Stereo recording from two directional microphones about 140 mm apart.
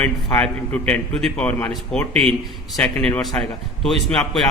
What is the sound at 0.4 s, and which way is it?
A man's voice, 10° left (ahead or behind).